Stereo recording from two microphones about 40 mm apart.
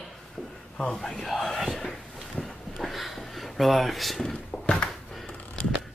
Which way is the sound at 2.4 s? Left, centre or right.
Centre.